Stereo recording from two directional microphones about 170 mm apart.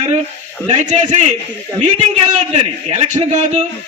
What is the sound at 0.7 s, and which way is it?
A man's voice, 45° right (ahead or behind).